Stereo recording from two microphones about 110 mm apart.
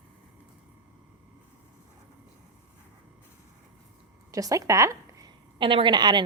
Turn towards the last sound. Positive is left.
turn(degrees=-40)  # may be behind; listen again after turning